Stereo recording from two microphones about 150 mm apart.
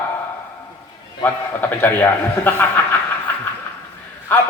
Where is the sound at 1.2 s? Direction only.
10° left (ahead or behind).